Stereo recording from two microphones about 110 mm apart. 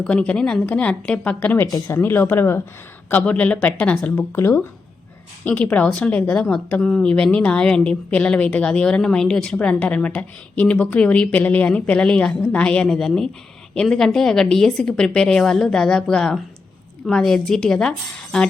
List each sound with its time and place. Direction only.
0.0 s speech: 10° left (ahead or behind)
0.6 s speech: 15° left (ahead or behind)
1.6 s speech: 25° left (ahead or behind)
5.5 s a woman's voice: 15° left (ahead or behind)